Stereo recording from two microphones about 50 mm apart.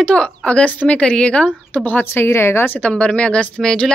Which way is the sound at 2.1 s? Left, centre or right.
Left.